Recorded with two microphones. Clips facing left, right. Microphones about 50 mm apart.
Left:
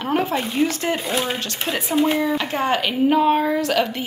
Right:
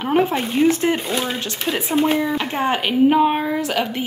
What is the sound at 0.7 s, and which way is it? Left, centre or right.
Speech, right.